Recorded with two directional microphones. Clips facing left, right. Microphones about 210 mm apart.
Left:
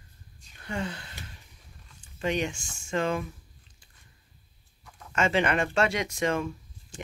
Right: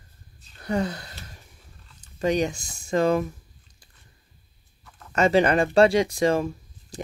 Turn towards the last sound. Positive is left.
turn(degrees=-35)  # may be behind; listen again after turning